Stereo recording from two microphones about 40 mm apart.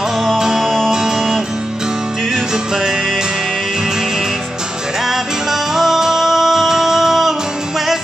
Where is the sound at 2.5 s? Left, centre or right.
Centre.